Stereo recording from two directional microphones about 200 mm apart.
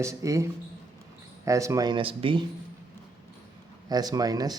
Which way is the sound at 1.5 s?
15° right (ahead or behind).